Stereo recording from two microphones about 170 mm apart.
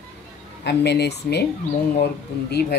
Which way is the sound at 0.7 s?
75° left (ahead or behind).